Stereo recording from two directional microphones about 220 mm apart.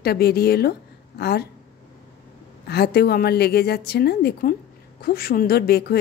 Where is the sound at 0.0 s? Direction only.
45° left (ahead or behind).